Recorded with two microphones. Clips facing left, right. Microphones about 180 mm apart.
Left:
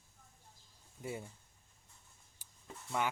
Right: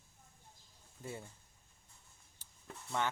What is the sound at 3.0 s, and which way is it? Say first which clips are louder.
Speech: left 1 dB; 10° left (ahead or behind).